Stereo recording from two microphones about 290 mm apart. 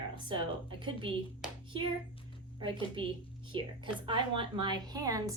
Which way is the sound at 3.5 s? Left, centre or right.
Centre.